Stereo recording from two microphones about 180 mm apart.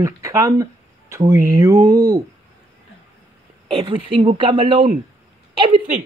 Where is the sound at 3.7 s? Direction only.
30° right (ahead or behind).